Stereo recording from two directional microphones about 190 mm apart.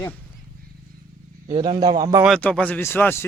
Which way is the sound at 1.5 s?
25° right (ahead or behind).